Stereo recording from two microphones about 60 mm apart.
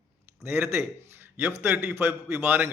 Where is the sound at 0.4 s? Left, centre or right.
Right.